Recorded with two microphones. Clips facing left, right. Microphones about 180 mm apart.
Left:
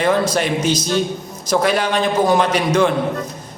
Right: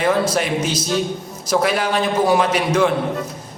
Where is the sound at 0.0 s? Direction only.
5° right (ahead or behind).